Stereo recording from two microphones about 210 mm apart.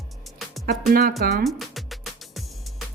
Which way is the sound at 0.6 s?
45° right (ahead or behind).